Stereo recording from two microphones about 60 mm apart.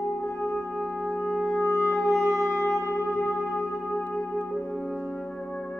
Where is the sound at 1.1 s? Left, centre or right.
Centre.